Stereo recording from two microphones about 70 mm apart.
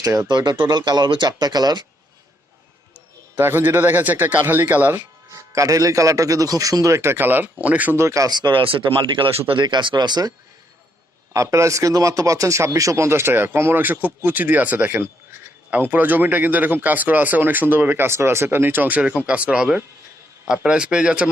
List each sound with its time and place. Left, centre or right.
0.0 s speech: right
0.3 s speech: right
1.3 s speech: right
3.3 s speech: right
5.3 s speech: right
7.9 s speech: right
8.3 s speech: right
9.6 s speech: right
11.3 s speech: right; by 21.2 s centre